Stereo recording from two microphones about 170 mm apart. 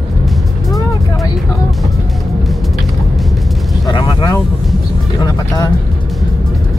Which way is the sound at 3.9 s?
25° left (ahead or behind).